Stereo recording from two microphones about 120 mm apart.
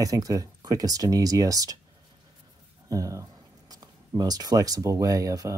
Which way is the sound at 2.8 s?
25° right (ahead or behind).